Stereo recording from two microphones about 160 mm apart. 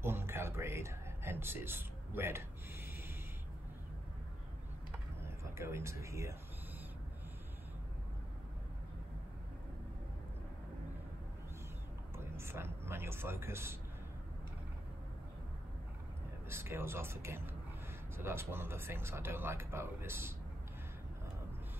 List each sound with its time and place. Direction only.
0.0 s a sound: 15° right (ahead or behind)
5.2 s speech: 15° right (ahead or behind)
12.2 s speech: 15° right (ahead or behind)
16.4 s speech: 15° right (ahead or behind)